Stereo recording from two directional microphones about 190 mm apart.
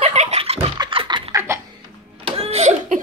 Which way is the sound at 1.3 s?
15° right (ahead or behind).